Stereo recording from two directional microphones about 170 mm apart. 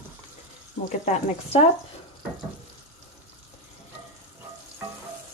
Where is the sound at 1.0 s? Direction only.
40° left (ahead or behind).